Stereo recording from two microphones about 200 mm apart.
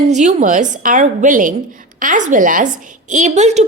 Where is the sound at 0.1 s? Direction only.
35° right (ahead or behind).